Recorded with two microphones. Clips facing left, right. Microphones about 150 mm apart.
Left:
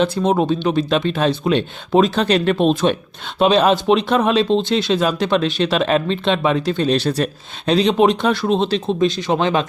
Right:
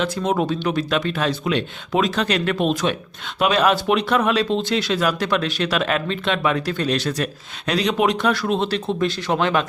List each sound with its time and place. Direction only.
0.0 s speech: 30° left (ahead or behind)